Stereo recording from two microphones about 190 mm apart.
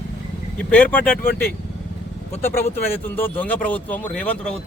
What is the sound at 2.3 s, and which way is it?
Speech, 35° left (ahead or behind).